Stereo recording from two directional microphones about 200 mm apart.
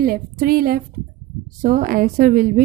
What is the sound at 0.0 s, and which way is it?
A woman's voice, 45° right (ahead or behind).